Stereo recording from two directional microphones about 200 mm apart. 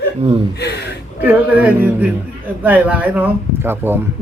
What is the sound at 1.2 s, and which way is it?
Speech, 10° right (ahead or behind).